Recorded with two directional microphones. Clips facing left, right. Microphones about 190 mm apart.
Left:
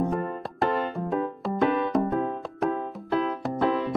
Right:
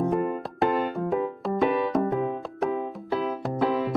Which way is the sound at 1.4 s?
Centre (ahead or behind).